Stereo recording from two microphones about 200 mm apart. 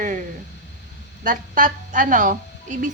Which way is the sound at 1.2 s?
40° right (ahead or behind).